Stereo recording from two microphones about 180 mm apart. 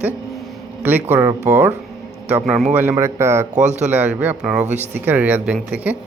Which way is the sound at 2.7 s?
10° right (ahead or behind).